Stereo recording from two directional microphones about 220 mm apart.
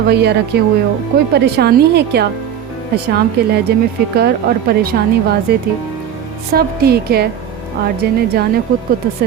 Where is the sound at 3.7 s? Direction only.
45° right (ahead or behind).